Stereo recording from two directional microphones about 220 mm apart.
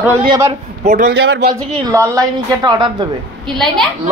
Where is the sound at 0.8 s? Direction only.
40° right (ahead or behind).